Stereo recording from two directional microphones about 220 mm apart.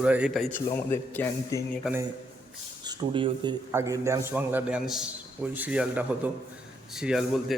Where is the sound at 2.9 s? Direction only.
20° right (ahead or behind); by 7.5 s centre (ahead or behind).